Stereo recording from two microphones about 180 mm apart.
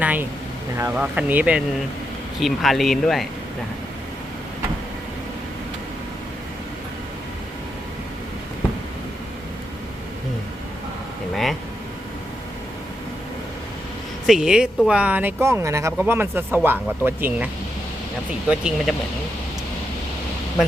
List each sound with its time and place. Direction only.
0.0 s speech: 10° right (ahead or behind)
14.3 s speech: centre (ahead or behind)